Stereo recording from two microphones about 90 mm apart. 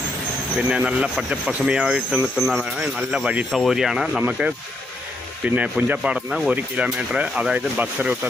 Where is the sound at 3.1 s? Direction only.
10° right (ahead or behind).